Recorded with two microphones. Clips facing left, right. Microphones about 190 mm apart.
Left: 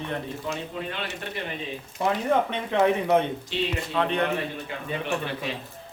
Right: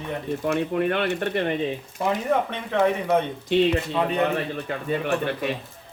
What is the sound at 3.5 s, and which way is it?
Speech, 55° right (ahead or behind).